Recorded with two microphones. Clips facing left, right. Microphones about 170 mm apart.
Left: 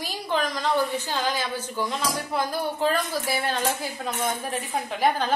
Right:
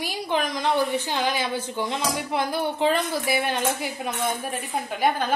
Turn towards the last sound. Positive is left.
turn(degrees=-5)  # may be behind; listen again after turning